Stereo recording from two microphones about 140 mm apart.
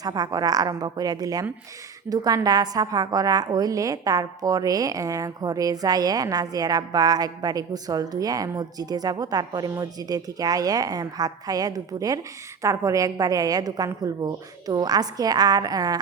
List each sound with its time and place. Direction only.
0.0 s a woman's voice: 25° right (ahead or behind)